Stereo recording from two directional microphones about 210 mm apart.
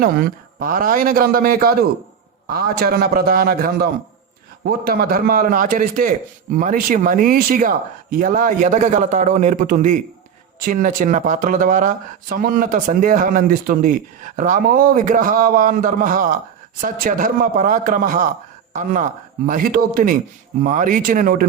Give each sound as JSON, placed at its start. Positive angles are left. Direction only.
{"t": 0.0, "sound": "a man's voice", "side_deg": -45}